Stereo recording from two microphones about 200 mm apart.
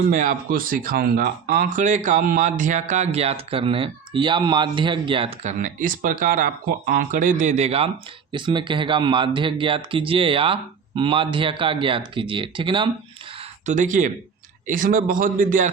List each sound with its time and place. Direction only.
0.1 s speech: 40° right (ahead or behind); by 12.9 s 25° right (ahead or behind)
13.3 s a sound: 35° right (ahead or behind)
14.7 s speech: 45° right (ahead or behind)